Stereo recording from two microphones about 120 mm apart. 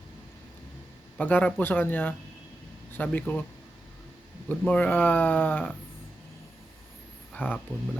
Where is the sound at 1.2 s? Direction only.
15° left (ahead or behind).